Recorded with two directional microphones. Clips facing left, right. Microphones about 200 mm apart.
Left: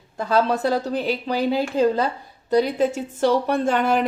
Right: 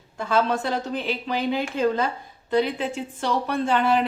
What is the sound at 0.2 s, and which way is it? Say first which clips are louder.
A woman's voice: left 3 dB; 35° left (ahead or behind).